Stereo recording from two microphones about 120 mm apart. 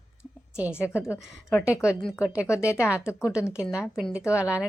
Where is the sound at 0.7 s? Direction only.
20° left (ahead or behind).